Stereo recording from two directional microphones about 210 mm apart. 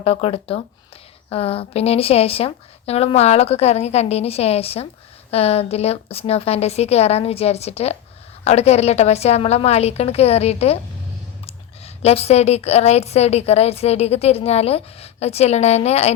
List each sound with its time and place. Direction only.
0.0 s a woman's voice: 30° left (ahead or behind)